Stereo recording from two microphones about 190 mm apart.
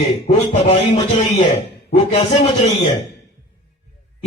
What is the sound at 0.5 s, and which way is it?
A man's voice, 30° left (ahead or behind).